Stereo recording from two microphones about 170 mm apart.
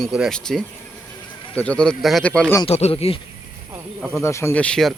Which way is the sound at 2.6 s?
35° left (ahead or behind).